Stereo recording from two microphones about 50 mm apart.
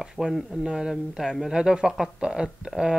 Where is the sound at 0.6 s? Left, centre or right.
Centre.